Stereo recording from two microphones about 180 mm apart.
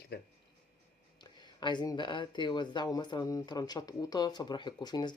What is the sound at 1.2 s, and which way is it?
Speech, 25° left (ahead or behind).